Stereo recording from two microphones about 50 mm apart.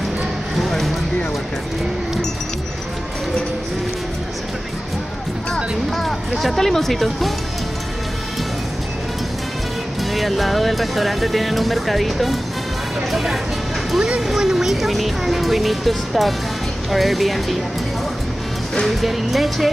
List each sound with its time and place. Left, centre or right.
0.6 s a sound: centre
5.9 s speech: centre
10.1 s speech: centre
13.9 s speech: centre
18.9 s speech: centre